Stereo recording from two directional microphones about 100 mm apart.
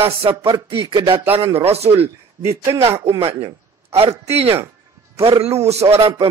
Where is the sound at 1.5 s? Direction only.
90° right.